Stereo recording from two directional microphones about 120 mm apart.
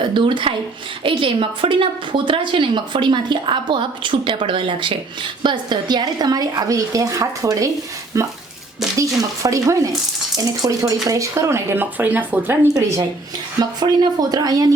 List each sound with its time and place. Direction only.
0.1 s a woman's voice: 45° right (ahead or behind); by 12.5 s 15° right (ahead or behind)
13.6 s speech: 35° right (ahead or behind)